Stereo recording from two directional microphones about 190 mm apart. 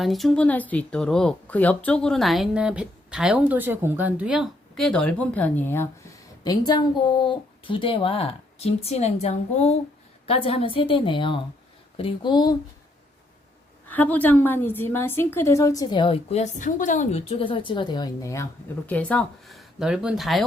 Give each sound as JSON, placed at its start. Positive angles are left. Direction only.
{"t": 0.0, "sound": "a woman's voice", "side_deg": 0}
{"t": 13.9, "sound": "a woman's voice", "side_deg": 10}